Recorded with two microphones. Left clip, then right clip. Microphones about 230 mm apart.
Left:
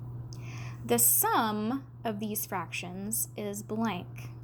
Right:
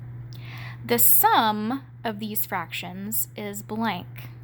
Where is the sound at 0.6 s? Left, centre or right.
Right.